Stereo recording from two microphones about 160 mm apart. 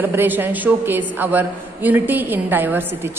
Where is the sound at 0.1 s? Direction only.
10° right (ahead or behind).